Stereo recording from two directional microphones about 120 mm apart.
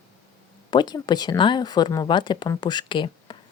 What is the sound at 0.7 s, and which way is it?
Speech, 35° left (ahead or behind).